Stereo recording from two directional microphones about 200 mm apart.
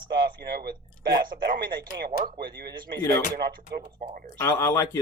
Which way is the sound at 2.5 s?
55° right (ahead or behind).